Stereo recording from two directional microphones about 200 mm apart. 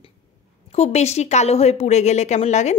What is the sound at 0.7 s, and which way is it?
A woman's voice, 30° left (ahead or behind).